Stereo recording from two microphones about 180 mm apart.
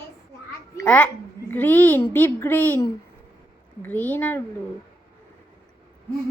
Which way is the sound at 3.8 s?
10° left (ahead or behind).